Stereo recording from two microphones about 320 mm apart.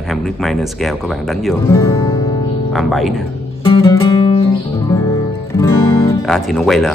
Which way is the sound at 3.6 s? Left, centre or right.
Centre.